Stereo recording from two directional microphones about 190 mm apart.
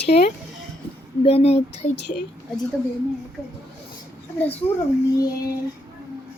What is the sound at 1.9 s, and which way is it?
Speech, 60° left (ahead or behind).